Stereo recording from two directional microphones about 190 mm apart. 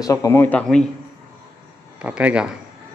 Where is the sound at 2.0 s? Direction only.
5° right (ahead or behind).